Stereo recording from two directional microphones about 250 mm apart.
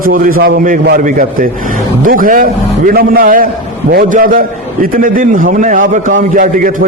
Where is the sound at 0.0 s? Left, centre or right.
Right.